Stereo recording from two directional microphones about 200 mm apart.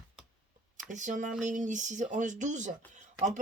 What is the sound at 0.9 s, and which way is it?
Speech, 40° right (ahead or behind).